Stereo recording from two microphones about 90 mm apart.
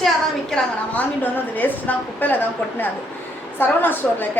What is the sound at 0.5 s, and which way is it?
A woman's voice, 20° left (ahead or behind).